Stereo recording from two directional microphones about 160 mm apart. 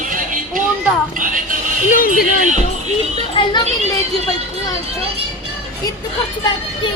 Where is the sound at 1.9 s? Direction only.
60° left (ahead or behind).